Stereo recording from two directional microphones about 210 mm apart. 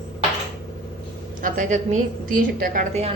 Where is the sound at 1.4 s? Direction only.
35° right (ahead or behind).